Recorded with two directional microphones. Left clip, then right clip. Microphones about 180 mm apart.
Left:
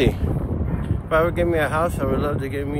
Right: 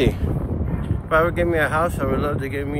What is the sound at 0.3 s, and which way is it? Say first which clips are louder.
Speech: even; centre (ahead or behind).